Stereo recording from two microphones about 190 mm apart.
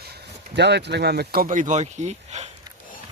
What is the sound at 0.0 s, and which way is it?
Speech, 60° right (ahead or behind).